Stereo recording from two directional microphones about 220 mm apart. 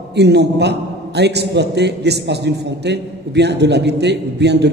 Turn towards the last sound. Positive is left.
turn(degrees=-50)  # may be behind; listen again after turning